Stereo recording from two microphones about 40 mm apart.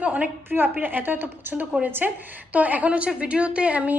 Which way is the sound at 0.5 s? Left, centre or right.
Right.